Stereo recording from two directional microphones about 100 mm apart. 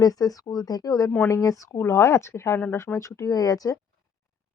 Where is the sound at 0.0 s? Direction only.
40° left (ahead or behind).